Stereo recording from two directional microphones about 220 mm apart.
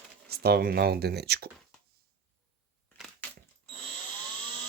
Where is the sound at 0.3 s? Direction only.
45° right (ahead or behind).